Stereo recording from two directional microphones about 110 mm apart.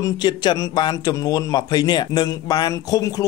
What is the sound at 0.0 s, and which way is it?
A man's voice, 40° left (ahead or behind).